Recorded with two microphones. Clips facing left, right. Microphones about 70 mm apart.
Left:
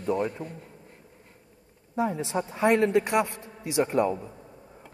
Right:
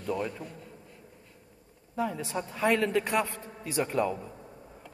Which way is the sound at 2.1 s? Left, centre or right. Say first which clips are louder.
Left 5 dB; left.